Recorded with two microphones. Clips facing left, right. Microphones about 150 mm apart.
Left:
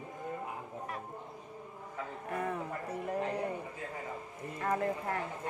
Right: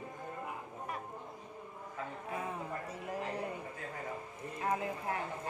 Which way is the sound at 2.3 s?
60° left (ahead or behind).